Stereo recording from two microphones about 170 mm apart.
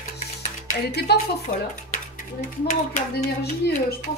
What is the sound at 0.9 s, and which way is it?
Speech, 70° left (ahead or behind).